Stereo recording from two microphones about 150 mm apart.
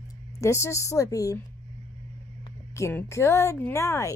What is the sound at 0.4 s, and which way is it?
Speech, 20° left (ahead or behind).